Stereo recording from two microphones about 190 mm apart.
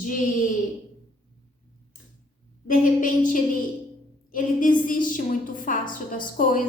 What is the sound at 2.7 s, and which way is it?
A woman's voice, 45° left (ahead or behind).